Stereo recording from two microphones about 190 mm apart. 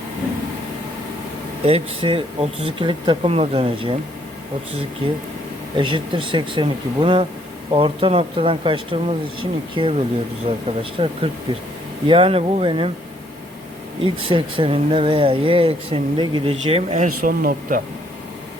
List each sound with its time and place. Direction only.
1.6 s speech: 30° right (ahead or behind)
5.7 s speech: 25° right (ahead or behind)
14.0 s speech: 25° right (ahead or behind); by 17.7 s 45° right (ahead or behind)